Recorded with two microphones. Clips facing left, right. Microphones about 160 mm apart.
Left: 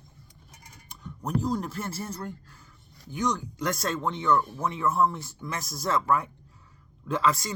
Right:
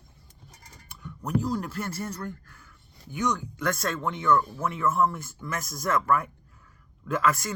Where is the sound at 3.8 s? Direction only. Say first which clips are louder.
Even; 30° left (ahead or behind).